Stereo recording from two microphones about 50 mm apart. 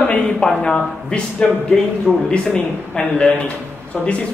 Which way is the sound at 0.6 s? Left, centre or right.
Centre.